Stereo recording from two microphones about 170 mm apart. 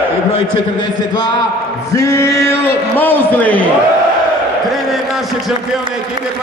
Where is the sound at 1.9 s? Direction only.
20° left (ahead or behind).